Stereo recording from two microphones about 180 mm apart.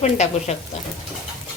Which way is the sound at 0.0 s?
40° left (ahead or behind).